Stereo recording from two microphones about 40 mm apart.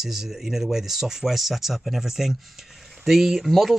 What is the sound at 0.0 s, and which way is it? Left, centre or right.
Speech, centre.